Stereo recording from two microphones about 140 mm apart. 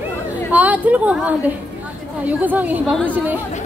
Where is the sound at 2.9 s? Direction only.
5° left (ahead or behind).